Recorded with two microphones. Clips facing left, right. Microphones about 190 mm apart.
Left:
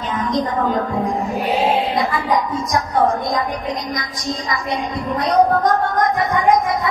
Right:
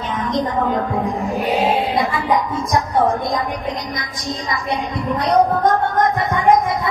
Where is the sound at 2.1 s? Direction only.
25° right (ahead or behind).